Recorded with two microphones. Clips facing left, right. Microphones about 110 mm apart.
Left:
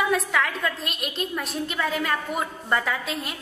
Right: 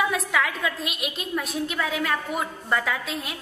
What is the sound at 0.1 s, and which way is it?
A woman's voice, centre (ahead or behind).